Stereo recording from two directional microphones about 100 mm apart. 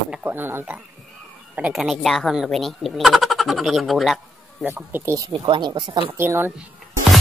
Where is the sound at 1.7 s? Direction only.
Centre (ahead or behind).